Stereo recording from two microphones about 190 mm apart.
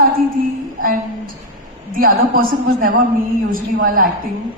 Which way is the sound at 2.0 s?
45° right (ahead or behind).